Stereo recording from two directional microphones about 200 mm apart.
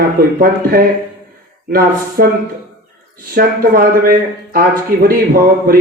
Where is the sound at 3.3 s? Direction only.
45° right (ahead or behind).